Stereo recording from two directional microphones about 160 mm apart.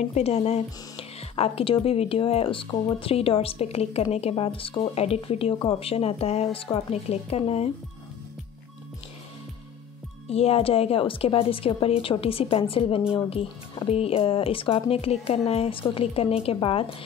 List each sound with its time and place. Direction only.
0.1 s speech: 40° left (ahead or behind)
10.2 s speech: 40° left (ahead or behind)